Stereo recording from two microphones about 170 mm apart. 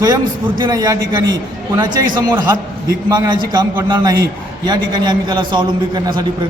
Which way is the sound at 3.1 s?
25° right (ahead or behind).